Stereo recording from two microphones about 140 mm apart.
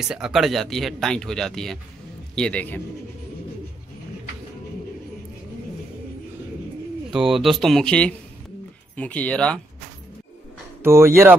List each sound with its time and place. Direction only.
0.1 s speech: 5° right (ahead or behind)
7.1 s speech: 5° right (ahead or behind)
10.8 s speech: 20° right (ahead or behind)